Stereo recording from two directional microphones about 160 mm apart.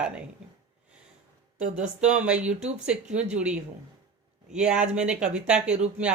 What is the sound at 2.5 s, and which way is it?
Speech, 45° right (ahead or behind).